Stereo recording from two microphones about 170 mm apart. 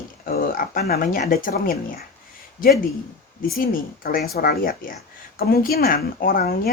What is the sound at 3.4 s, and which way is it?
Speech, 60° left (ahead or behind).